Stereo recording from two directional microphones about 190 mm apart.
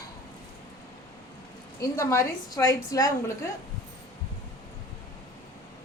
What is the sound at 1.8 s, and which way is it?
A woman's voice, 15° left (ahead or behind).